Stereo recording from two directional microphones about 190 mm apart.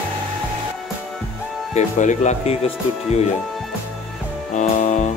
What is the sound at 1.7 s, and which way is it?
Speech, 35° left (ahead or behind).